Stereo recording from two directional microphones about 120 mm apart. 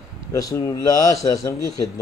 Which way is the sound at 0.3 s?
30° left (ahead or behind).